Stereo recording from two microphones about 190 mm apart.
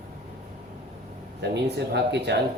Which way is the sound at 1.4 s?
65° right (ahead or behind).